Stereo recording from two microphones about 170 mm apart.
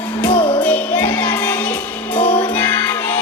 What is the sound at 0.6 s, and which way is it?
Music, 10° left (ahead or behind).